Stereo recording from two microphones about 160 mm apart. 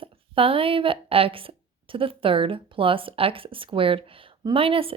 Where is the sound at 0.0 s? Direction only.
35° right (ahead or behind).